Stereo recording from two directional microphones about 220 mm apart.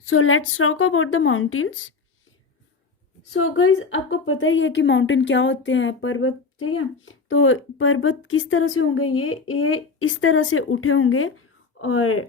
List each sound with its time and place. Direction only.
0.0 s speech: 65° left (ahead or behind)
3.3 s a woman's voice: 65° left (ahead or behind)